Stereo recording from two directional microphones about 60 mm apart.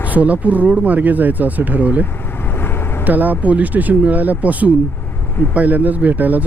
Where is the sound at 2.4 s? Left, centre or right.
Left.